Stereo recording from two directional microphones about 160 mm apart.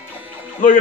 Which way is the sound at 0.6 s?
60° left (ahead or behind).